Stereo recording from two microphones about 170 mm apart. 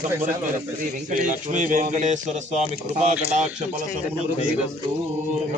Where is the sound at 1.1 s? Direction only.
50° right (ahead or behind).